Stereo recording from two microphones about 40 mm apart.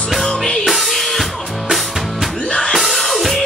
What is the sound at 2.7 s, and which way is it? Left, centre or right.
Music, centre.